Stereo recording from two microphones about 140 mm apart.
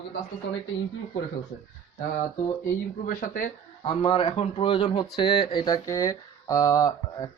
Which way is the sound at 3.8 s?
40° left (ahead or behind).